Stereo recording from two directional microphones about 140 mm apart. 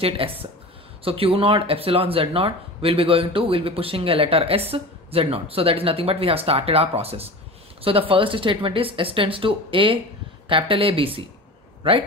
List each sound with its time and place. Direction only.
0.0 s a woman's voice: 45° right (ahead or behind)